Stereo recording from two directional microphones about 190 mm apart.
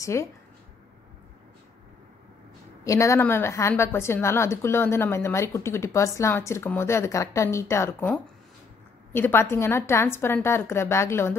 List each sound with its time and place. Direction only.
0.0 s a woman's voice: 15° left (ahead or behind)
2.8 s a woman's voice: 15° left (ahead or behind)